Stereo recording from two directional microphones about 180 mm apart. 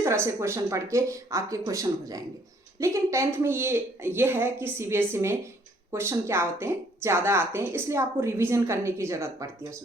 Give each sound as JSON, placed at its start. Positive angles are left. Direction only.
{"t": 0.0, "sound": "a woman's voice", "side_deg": -15}